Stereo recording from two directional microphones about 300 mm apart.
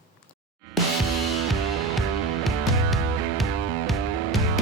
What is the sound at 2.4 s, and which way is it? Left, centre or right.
Music, centre.